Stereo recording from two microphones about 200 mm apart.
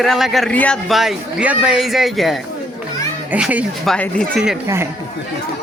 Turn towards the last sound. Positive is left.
turn(degrees=0)  # may be behind; listen again after turning